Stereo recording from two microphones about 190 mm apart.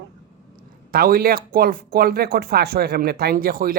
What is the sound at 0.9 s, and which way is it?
Speech, 50° right (ahead or behind).